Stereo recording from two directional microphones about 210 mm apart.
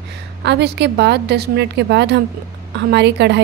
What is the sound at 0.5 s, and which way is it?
A woman's voice, 55° right (ahead or behind).